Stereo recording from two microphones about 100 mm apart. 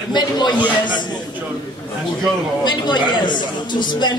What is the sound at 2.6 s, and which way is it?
A man's voice, 50° left (ahead or behind).